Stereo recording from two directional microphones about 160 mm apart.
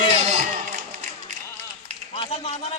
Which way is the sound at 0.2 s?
45° right (ahead or behind).